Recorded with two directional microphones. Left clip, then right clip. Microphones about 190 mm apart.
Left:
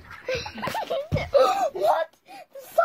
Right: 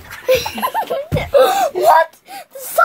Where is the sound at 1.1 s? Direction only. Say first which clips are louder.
Right 8 dB; 20° right (ahead or behind); by 2.8 s centre (ahead or behind).